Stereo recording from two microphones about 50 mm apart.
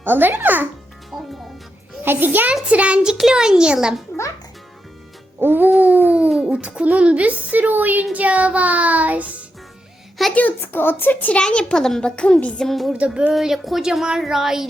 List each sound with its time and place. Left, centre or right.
0.0 s a child's voice: right
2.0 s a child's voice: right
2.6 s a woman's voice: right
5.4 s music: right
5.8 s a child's voice: right
6.2 s speech: centre
6.6 s a woman's voice: right
10.2 s music: centre
10.6 s a child's voice: left
11.3 s a child's voice: centre
12.6 s music: centre
12.9 s a woman's voice: centre
13.3 s speech: centre